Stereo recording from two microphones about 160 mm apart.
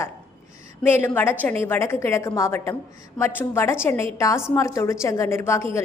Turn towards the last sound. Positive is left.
turn(degrees=15)  # may be behind; listen again after turning